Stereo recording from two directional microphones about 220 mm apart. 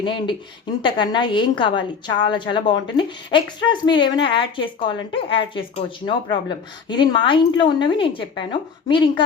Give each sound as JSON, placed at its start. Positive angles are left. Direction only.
{"t": 0.0, "sound": "a woman's voice", "side_deg": 20}